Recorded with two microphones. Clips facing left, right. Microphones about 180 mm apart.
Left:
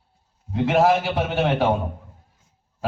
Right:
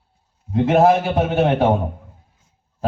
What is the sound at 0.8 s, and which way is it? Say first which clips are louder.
Speech: right 4 dB; 50° right (ahead or behind).